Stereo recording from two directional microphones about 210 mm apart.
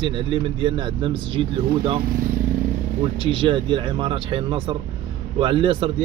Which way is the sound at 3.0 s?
25° right (ahead or behind).